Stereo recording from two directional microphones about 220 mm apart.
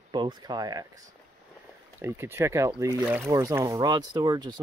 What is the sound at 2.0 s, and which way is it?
Speech, 10° right (ahead or behind).